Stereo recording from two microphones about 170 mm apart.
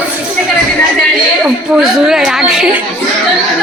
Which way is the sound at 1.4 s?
Centre (ahead or behind).